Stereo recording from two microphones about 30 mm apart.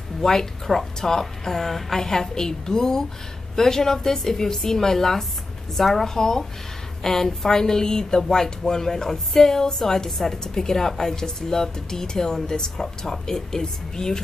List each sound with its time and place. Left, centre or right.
0.2 s a woman's voice: centre